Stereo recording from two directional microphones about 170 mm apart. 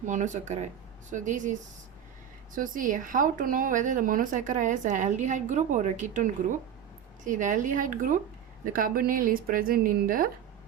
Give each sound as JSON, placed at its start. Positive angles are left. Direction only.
{"t": 0.0, "sound": "speech", "side_deg": -45}
{"t": 2.6, "sound": "a woman's voice", "side_deg": -50}